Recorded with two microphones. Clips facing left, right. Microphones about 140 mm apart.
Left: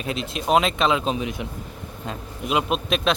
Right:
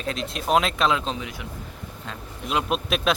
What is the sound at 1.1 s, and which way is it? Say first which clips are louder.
Speech: left 5 dB; 20° left (ahead or behind).